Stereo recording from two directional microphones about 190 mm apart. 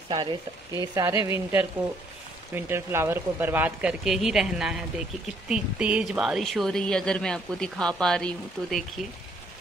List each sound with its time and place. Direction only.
0.1 s speech: 20° right (ahead or behind)
2.5 s speech: 15° right (ahead or behind)